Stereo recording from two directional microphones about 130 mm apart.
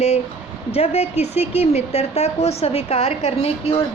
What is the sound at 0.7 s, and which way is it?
A woman's voice, 55° left (ahead or behind).